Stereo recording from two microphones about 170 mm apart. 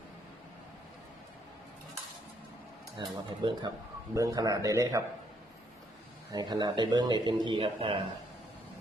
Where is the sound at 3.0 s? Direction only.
30° right (ahead or behind).